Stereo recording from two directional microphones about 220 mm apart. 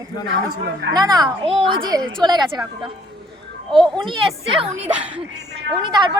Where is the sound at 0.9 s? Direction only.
15° right (ahead or behind).